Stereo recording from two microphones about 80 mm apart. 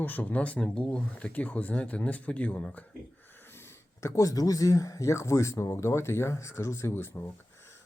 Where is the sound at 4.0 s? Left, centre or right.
Left.